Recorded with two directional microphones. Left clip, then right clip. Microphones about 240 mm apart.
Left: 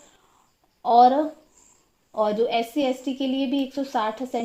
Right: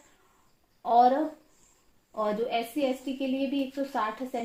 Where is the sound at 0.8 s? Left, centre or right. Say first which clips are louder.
Left 6 dB; left.